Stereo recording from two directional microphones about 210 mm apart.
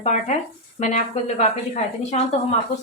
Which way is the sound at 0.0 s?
35° left (ahead or behind).